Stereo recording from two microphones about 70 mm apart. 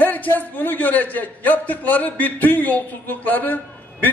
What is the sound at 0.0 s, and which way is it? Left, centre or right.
A man's voice, left.